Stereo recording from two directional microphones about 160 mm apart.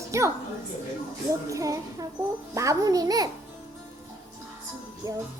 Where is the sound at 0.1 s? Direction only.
20° right (ahead or behind).